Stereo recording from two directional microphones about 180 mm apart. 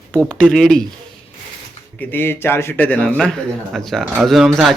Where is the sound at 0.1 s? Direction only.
5° left (ahead or behind).